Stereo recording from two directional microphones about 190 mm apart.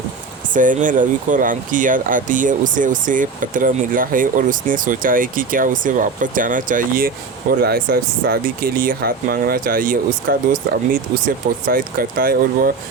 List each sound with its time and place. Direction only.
0.5 s speech: 45° right (ahead or behind)